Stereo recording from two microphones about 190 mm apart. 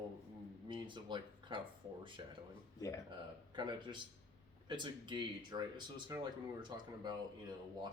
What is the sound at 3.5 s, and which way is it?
Speech, 25° right (ahead or behind).